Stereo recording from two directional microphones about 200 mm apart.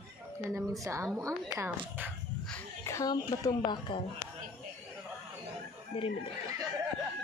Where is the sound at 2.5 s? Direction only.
15° left (ahead or behind).